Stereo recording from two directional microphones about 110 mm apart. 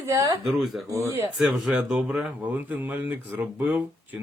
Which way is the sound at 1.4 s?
10° right (ahead or behind).